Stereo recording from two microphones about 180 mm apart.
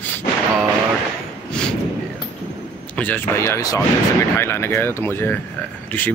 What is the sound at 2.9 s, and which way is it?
Speech, 10° left (ahead or behind).